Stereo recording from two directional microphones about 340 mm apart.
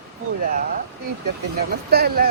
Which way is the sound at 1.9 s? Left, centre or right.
Right.